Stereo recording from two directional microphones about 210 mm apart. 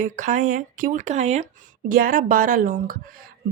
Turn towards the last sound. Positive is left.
turn(degrees=-40)  # may be behind; listen again after turning